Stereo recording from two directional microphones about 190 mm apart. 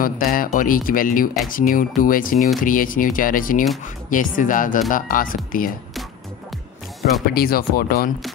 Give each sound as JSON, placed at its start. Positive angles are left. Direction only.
{"t": 0.0, "sound": "speech", "side_deg": 45}
{"t": 7.3, "sound": "speech", "side_deg": 50}